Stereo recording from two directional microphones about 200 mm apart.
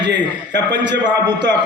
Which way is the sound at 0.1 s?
60° right (ahead or behind).